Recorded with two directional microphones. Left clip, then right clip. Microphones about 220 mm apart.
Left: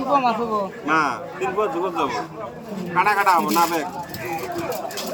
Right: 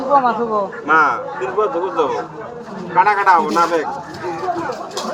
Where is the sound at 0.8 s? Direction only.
45° left (ahead or behind).